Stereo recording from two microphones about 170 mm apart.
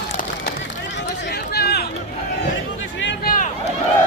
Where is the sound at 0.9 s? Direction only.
90° left; by 1.8 s 70° left (ahead or behind).